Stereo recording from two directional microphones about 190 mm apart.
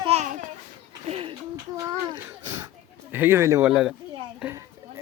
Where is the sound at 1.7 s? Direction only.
20° right (ahead or behind).